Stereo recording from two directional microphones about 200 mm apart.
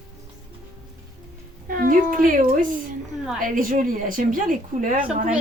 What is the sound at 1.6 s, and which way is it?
A woman's voice, 45° right (ahead or behind).